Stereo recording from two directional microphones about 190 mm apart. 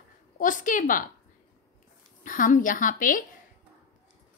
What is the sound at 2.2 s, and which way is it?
Speech, 45° left (ahead or behind).